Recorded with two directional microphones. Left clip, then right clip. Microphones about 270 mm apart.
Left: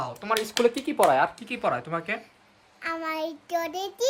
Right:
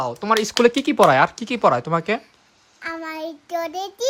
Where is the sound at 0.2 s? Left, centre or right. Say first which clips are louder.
Right 7 dB; right.